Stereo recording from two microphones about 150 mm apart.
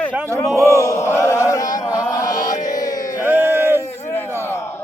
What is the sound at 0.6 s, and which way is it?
Chant, 20° left (ahead or behind).